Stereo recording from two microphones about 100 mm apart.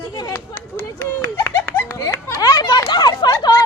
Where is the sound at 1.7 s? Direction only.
25° left (ahead or behind).